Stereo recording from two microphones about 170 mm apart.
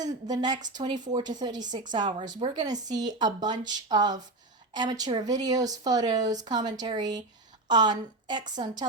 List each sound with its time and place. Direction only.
0.0 s speech: 25° right (ahead or behind)